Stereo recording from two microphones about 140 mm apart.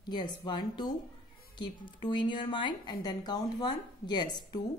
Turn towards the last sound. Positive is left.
turn(degrees=30)  # may be behind; listen again after turning